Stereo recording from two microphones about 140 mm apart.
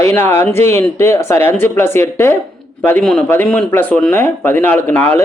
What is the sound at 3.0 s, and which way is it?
A man's voice, 5° left (ahead or behind).